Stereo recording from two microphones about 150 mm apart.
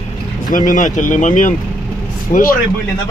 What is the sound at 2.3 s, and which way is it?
Speech, 70° left (ahead or behind).